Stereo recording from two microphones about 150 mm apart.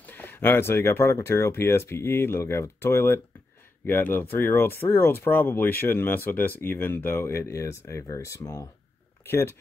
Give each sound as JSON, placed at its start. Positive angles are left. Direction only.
{"t": 0.0, "sound": "speech", "side_deg": 15}